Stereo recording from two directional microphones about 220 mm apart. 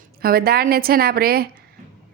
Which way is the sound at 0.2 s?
45° right (ahead or behind).